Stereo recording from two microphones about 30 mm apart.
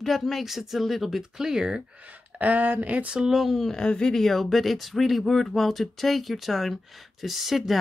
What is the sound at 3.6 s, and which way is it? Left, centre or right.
Speech, left.